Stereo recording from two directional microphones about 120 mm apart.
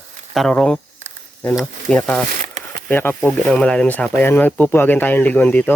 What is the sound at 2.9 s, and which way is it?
Speech, 15° left (ahead or behind).